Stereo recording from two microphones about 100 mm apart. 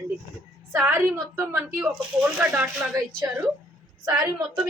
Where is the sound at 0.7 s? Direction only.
20° right (ahead or behind).